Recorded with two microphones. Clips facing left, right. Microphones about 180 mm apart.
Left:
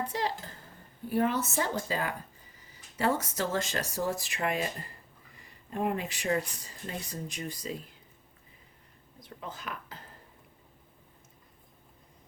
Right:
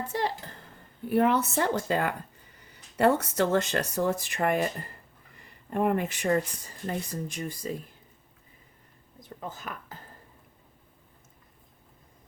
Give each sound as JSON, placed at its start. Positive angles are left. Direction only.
{"t": 0.1, "sound": "speech", "side_deg": -50}
{"t": 1.0, "sound": "speech", "side_deg": -60}
{"t": 9.4, "sound": "speech", "side_deg": -45}